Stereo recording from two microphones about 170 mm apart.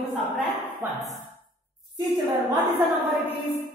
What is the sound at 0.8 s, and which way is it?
Speech, 15° right (ahead or behind).